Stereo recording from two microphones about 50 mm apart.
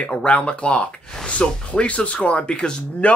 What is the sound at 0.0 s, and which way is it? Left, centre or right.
Speech, left.